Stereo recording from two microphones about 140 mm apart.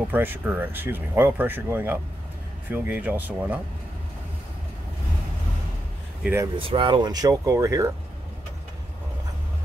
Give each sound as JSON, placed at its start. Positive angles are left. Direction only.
{"t": 0.1, "sound": "speech", "side_deg": -15}
{"t": 6.2, "sound": "speech", "side_deg": -20}
{"t": 6.5, "sound": "speech", "side_deg": -40}